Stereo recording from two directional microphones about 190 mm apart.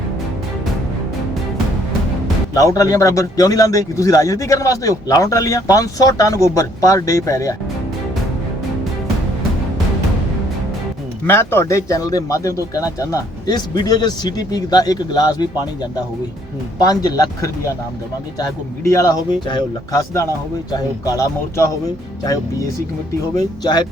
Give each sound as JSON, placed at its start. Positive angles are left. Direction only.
{"t": 2.6, "sound": "a man's voice", "side_deg": 20}
{"t": 11.3, "sound": "a man's voice", "side_deg": 15}
{"t": 16.8, "sound": "a man's voice", "side_deg": 20}
{"t": 23.4, "sound": "a man's voice", "side_deg": 20}